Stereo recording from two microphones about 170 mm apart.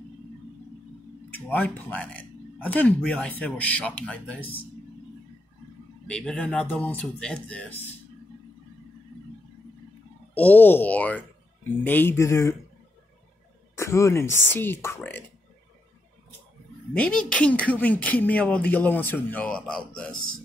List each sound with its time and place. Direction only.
1.3 s speech: 10° left (ahead or behind)
4.4 s a man's voice: 30° left (ahead or behind)
6.0 s speech: 5° left (ahead or behind)
10.3 s speech: 10° left (ahead or behind)
13.7 s speech: 15° left (ahead or behind)
16.9 s speech: 5° left (ahead or behind)